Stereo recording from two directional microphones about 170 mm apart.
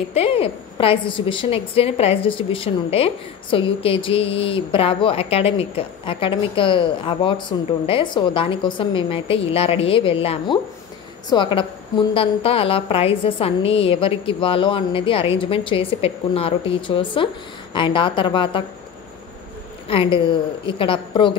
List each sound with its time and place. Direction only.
0.1 s a woman's voice: 35° left (ahead or behind)
19.9 s a woman's voice: 30° left (ahead or behind)